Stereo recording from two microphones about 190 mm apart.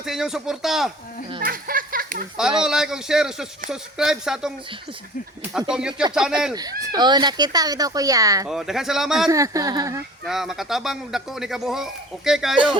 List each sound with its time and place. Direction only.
0.0 s speech: centre (ahead or behind)
1.4 s a sound: 50° right (ahead or behind)
2.6 s speech: 5° right (ahead or behind)
5.5 s speech: 5° right (ahead or behind)
6.5 s speech: 20° right (ahead or behind)
8.4 s speech: centre (ahead or behind)
9.3 s speech: 15° right (ahead or behind)
10.2 s speech: centre (ahead or behind)